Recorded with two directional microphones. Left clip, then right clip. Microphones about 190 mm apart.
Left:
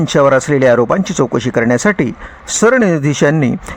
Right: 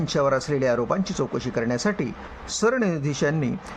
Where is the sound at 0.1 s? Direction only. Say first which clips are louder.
Left 12 dB; 40° left (ahead or behind).